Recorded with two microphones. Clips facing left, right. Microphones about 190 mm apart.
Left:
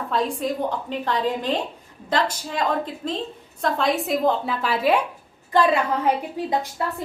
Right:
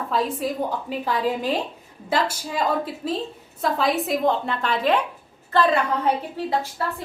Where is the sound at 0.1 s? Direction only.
5° right (ahead or behind); by 6.8 s 15° left (ahead or behind).